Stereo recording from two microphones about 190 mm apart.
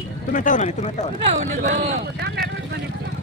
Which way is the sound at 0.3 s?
40° left (ahead or behind).